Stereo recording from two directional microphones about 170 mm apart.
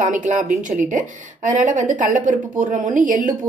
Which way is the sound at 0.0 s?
50° right (ahead or behind).